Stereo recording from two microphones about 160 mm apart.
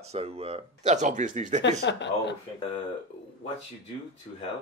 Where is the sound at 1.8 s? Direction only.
90° left.